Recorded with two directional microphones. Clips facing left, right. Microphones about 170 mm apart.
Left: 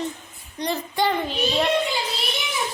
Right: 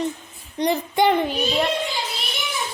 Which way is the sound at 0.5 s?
20° right (ahead or behind).